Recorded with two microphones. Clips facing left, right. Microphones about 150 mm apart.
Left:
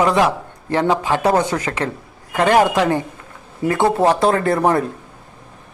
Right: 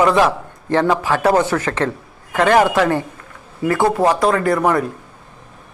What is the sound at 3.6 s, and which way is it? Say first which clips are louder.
Speech: even; 25° left (ahead or behind).